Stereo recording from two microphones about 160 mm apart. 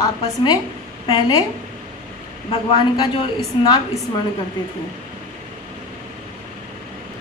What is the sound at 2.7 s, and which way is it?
Speech, 25° left (ahead or behind).